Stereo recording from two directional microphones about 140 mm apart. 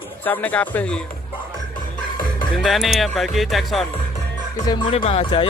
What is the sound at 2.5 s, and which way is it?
Speech, centre (ahead or behind).